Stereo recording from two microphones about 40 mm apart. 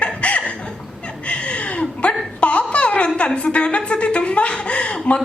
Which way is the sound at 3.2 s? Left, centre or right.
Left.